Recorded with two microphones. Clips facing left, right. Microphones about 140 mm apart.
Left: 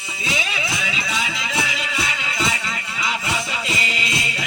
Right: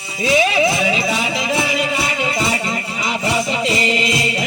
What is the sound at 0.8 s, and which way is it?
Music, 40° right (ahead or behind).